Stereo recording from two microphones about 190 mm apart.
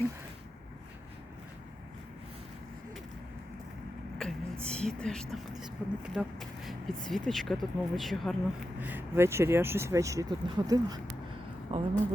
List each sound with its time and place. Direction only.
4.2 s speech: 5° left (ahead or behind)
8.8 s speech: 10° right (ahead or behind)
11.7 s speech: 30° right (ahead or behind)